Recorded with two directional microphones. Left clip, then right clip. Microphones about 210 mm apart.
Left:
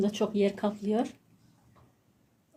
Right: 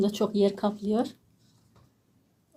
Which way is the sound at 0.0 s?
20° right (ahead or behind).